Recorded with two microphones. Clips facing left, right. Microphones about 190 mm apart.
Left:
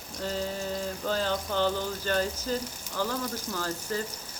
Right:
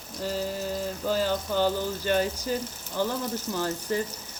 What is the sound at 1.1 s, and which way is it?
Speech, 10° right (ahead or behind).